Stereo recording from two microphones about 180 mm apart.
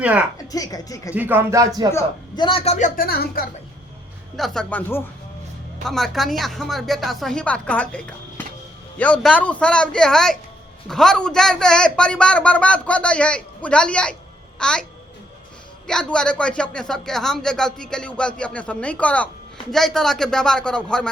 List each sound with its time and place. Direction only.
0.0 s speech: 10° right (ahead or behind)
0.3 s speech: 20° left (ahead or behind)
1.1 s speech: 10° right (ahead or behind)
1.9 s speech: 20° left (ahead or behind); by 3.4 s 55° left (ahead or behind)
4.4 s speech: centre (ahead or behind)
5.9 s speech: centre (ahead or behind)
15.9 s speech: 5° left (ahead or behind)